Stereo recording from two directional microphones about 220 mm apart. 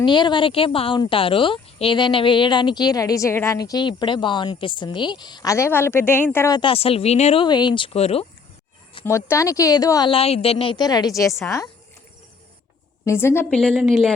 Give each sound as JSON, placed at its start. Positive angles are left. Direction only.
{"t": 0.0, "sound": "speech", "side_deg": 20}
{"t": 9.0, "sound": "a woman's voice", "side_deg": 10}
{"t": 13.1, "sound": "a woman's voice", "side_deg": 10}